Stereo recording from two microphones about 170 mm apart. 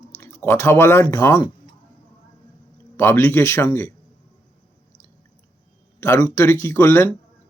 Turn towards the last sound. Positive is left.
turn(degrees=15)  # may be behind; listen again after turning